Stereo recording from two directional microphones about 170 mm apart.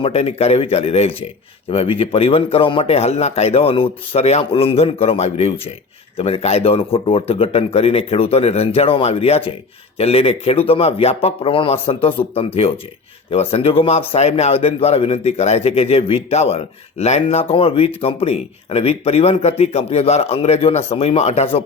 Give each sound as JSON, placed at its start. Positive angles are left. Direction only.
{"t": 0.0, "sound": "speech", "side_deg": 35}